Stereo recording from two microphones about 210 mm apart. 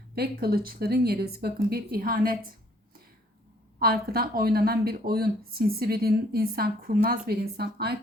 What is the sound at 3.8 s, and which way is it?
A woman's voice, 45° right (ahead or behind).